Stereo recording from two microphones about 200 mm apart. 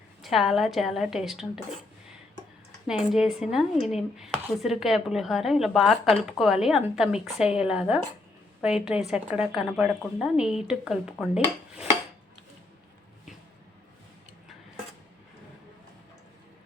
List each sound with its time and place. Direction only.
0.2 s speech: centre (ahead or behind)
3.1 s speech: centre (ahead or behind)